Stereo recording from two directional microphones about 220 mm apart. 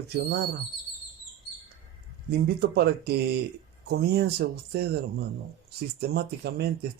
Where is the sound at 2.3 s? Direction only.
45° right (ahead or behind).